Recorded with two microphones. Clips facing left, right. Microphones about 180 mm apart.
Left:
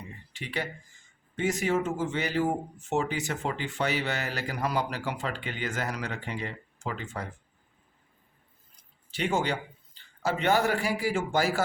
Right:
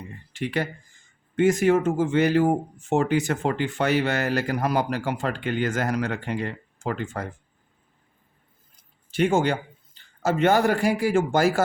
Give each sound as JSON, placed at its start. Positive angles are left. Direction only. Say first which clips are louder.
{"t": 0.3, "sound": "speech", "louder": "right 8 dB", "side_deg": -50}
{"t": 9.0, "sound": "speech", "louder": "right 7 dB", "side_deg": -50}